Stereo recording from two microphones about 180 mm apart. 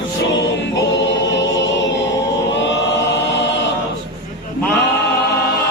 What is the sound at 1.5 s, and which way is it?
Choir, 90° left.